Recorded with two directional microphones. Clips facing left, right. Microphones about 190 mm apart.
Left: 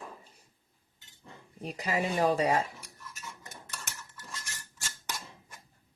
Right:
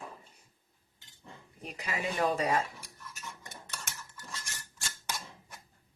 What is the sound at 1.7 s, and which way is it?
Speech, 35° left (ahead or behind).